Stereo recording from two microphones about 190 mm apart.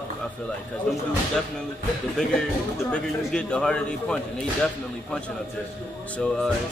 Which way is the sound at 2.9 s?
5° left (ahead or behind).